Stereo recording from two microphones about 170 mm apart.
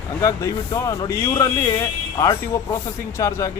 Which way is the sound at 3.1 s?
20° left (ahead or behind).